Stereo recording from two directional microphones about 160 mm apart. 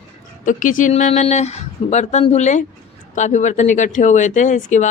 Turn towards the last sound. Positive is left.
turn(degrees=50)  # may be behind; listen again after turning